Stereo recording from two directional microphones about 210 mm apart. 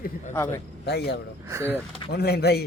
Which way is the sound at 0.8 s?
55° left (ahead or behind).